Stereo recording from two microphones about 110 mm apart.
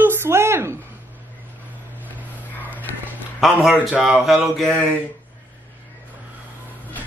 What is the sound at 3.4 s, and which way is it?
Speech, 5° right (ahead or behind).